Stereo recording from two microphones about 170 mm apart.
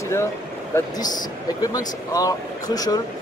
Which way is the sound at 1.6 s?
20° left (ahead or behind).